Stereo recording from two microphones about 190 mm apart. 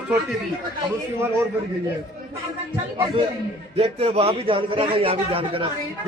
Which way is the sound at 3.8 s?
30° right (ahead or behind).